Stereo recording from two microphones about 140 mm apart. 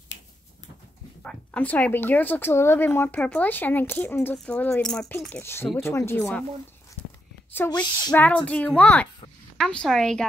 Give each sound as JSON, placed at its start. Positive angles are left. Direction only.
{"t": 1.2, "sound": "speech", "side_deg": 10}
{"t": 7.5, "sound": "a woman's voice", "side_deg": 15}